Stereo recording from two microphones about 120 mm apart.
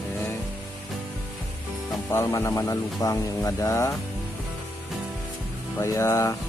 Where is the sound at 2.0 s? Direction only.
20° left (ahead or behind).